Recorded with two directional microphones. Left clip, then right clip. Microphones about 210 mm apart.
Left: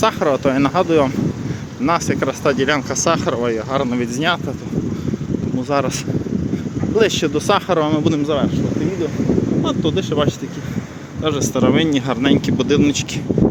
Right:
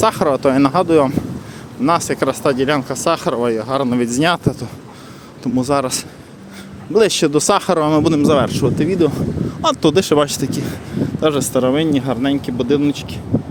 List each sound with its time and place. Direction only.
0.0 s speech: 25° right (ahead or behind)
5.5 s speech: 20° right (ahead or behind)
6.9 s speech: 20° right (ahead or behind)
9.0 s speech: 45° right (ahead or behind)
11.2 s speech: 25° right (ahead or behind)
11.5 s speech: 10° right (ahead or behind)